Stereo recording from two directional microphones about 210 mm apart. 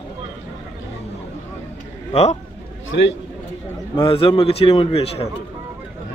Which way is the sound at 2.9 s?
65° left (ahead or behind).